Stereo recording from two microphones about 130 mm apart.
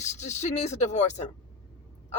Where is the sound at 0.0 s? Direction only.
65° left (ahead or behind).